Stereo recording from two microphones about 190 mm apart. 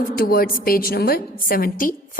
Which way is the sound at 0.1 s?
50° left (ahead or behind).